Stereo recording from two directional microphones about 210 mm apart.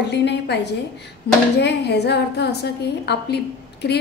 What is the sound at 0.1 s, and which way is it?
A woman's voice, 55° left (ahead or behind).